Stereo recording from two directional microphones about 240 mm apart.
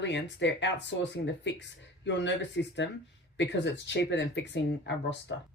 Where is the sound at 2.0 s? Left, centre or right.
Left.